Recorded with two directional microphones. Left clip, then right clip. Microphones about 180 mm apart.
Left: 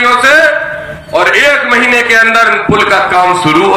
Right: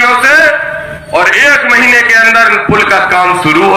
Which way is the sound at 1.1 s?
30° right (ahead or behind).